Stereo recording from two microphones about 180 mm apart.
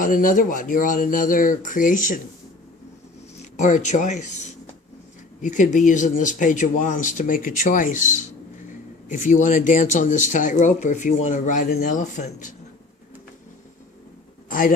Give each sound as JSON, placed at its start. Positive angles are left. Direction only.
{"t": 0.0, "sound": "speech", "side_deg": 50}
{"t": 3.3, "sound": "speech", "side_deg": 40}
{"t": 5.4, "sound": "speech", "side_deg": 45}
{"t": 14.5, "sound": "speech", "side_deg": 50}